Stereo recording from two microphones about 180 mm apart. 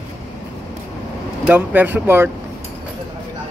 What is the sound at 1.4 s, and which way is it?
Speech, 10° right (ahead or behind).